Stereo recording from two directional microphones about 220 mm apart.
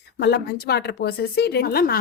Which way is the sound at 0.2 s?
50° left (ahead or behind).